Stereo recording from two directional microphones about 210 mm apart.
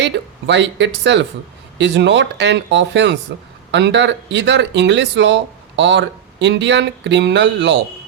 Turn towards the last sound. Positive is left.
turn(degrees=-55)  # may be behind; listen again after turning